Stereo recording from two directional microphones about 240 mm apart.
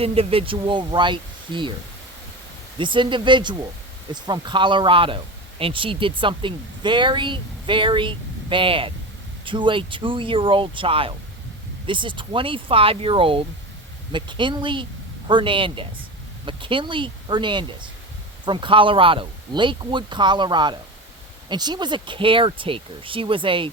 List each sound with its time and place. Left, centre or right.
0.0 s speech: right
2.7 s speech: centre